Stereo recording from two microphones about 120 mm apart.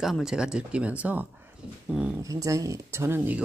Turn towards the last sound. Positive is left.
turn(degrees=-20)  # may be behind; listen again after turning